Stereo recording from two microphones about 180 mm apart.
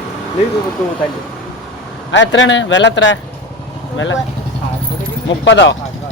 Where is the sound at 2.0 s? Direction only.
90° left.